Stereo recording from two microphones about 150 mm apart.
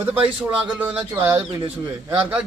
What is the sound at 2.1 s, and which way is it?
Speech, 10° right (ahead or behind).